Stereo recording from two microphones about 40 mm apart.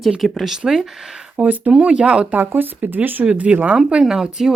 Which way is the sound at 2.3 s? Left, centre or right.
Right.